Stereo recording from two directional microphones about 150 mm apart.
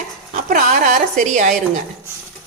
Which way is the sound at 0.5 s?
60° right (ahead or behind).